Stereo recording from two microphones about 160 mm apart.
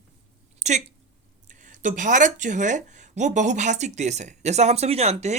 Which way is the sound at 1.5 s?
50° right (ahead or behind).